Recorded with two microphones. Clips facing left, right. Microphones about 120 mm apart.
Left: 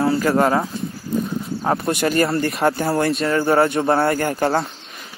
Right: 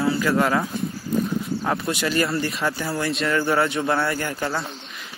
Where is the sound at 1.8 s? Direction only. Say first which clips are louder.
Left 5 dB; 50° left (ahead or behind).